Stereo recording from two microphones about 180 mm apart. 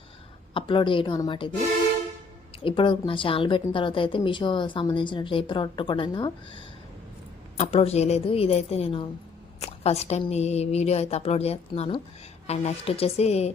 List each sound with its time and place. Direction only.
0.5 s speech: 30° left (ahead or behind)
2.6 s a woman's voice: 25° left (ahead or behind)